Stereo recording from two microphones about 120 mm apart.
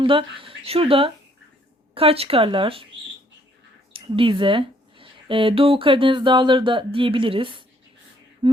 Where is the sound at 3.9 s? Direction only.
45° right (ahead or behind).